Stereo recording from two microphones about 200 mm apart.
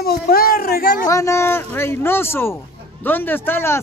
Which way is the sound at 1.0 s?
15° left (ahead or behind).